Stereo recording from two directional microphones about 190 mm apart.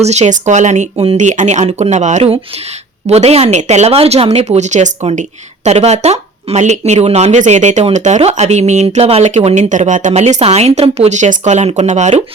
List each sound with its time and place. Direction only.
0.0 s speech: 35° right (ahead or behind)